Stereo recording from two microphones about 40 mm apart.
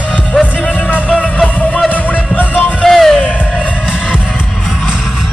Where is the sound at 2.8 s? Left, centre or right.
Centre.